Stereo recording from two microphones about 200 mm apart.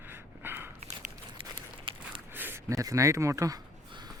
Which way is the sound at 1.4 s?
25° right (ahead or behind).